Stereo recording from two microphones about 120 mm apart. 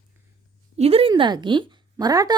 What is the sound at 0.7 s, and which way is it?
A woman's voice, 55° right (ahead or behind).